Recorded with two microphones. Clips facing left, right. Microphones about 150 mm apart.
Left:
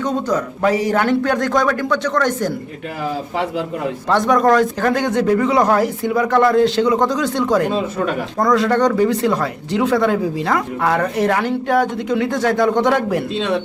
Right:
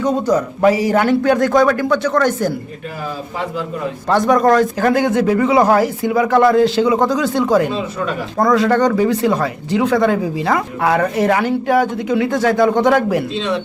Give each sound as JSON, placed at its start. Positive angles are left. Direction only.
{"t": 0.0, "sound": "a man's voice", "side_deg": -10}
{"t": 4.1, "sound": "speech", "side_deg": 0}
{"t": 7.7, "sound": "speech", "side_deg": 45}
{"t": 8.4, "sound": "speech", "side_deg": 0}
{"t": 13.3, "sound": "speech", "side_deg": 55}